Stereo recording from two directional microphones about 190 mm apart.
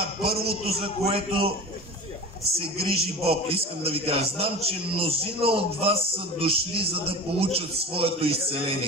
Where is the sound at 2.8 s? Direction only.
30° right (ahead or behind).